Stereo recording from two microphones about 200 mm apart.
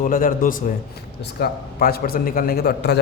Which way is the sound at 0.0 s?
45° left (ahead or behind).